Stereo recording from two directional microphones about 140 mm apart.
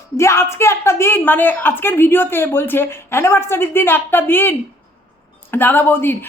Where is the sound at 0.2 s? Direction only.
20° left (ahead or behind).